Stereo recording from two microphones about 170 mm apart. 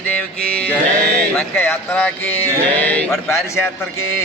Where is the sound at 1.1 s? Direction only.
5° left (ahead or behind).